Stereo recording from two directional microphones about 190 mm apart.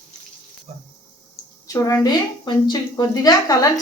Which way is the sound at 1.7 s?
15° left (ahead or behind).